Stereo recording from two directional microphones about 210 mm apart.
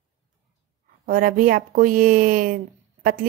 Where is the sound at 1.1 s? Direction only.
40° right (ahead or behind).